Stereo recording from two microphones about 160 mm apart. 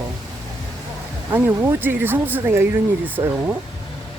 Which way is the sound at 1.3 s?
10° right (ahead or behind).